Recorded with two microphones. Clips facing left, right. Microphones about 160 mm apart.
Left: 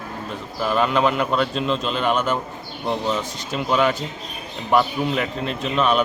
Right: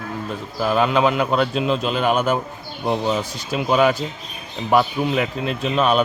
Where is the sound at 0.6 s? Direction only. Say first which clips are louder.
Right 2 dB; 5° right (ahead or behind).